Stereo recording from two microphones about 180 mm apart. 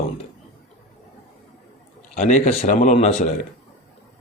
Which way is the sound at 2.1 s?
45° left (ahead or behind).